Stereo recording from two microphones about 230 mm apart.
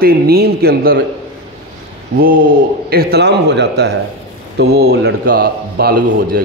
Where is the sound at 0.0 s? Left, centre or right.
Right.